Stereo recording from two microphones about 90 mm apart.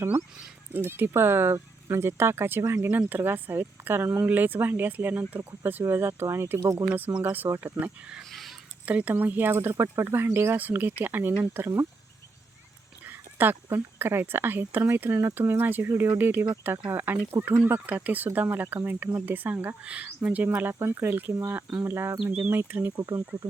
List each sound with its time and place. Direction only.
0.9 s speech: 25° right (ahead or behind)
8.2 s a sound: centre (ahead or behind)
8.9 s speech: 15° right (ahead or behind)
13.1 s speech: 20° right (ahead or behind)
22.2 s speech: 15° right (ahead or behind)